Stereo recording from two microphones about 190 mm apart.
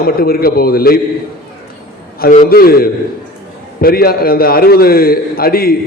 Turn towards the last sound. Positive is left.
turn(degrees=50)  # may be behind; listen again after turning